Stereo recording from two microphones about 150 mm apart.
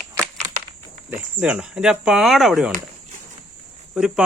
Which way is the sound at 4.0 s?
5° right (ahead or behind).